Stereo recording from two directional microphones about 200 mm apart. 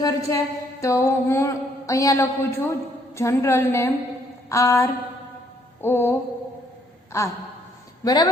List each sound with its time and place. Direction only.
0.0 s mantra: 15° left (ahead or behind)
4.4 s a sound: 15° left (ahead or behind)
5.8 s mantra: 10° left (ahead or behind)
8.0 s a man's voice: 20° left (ahead or behind)